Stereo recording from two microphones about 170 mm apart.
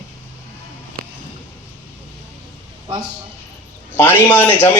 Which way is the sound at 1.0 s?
60° right (ahead or behind).